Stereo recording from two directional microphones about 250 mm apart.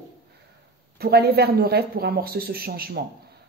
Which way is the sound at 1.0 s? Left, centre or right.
Right.